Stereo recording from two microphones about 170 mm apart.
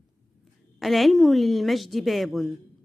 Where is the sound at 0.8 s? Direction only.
Centre (ahead or behind).